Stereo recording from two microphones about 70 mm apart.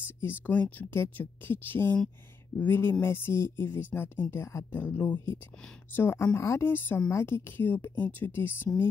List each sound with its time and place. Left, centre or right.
0.5 s speech: left